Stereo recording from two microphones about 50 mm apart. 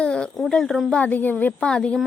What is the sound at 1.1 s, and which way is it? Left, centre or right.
Speech, left.